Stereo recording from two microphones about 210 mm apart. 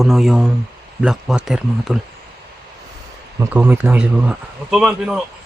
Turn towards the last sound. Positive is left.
turn(degrees=0)  # may be behind; listen again after turning